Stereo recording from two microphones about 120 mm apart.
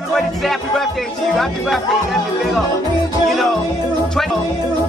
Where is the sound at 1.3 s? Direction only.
Centre (ahead or behind).